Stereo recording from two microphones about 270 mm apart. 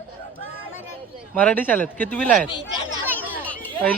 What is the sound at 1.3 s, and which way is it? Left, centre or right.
Speech, centre.